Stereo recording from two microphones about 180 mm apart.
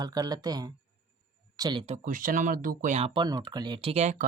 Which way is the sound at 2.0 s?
50° right (ahead or behind).